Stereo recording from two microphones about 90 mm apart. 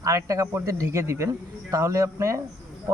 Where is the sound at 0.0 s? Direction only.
40° right (ahead or behind).